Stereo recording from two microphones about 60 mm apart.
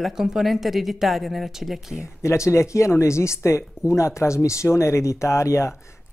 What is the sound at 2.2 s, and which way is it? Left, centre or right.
Speech, left.